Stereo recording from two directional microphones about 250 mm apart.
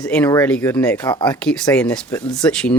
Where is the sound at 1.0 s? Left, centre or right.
Centre.